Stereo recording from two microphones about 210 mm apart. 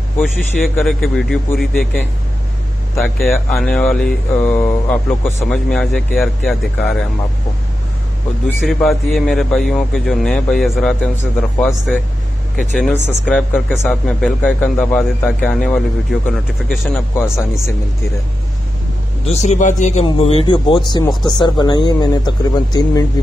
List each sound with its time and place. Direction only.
0.7 s speech: centre (ahead or behind)
3.2 s speech: 10° left (ahead or behind)
8.6 s speech: centre (ahead or behind)
12.9 s speech: 10° left (ahead or behind)
17.1 s speech: 10° left (ahead or behind)
19.2 s speech: 30° left (ahead or behind)